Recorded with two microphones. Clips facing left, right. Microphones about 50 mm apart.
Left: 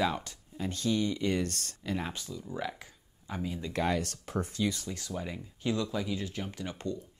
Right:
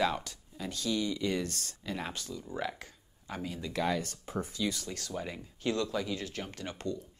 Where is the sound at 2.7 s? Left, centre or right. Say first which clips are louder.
Right 2 dB; centre.